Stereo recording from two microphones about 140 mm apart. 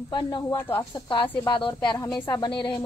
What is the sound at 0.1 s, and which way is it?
A woman's voice, 30° left (ahead or behind).